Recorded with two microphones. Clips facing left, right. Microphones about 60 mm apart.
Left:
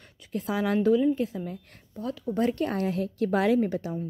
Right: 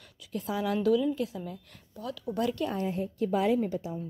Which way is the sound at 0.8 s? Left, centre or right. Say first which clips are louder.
Left 4 dB; left.